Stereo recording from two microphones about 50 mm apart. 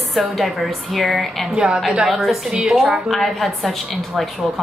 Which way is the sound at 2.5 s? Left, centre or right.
Centre.